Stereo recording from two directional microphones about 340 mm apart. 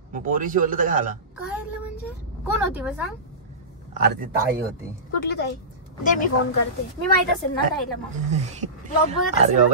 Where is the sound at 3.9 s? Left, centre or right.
Right.